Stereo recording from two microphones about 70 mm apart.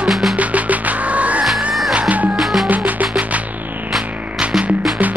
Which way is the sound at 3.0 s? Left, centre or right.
Right.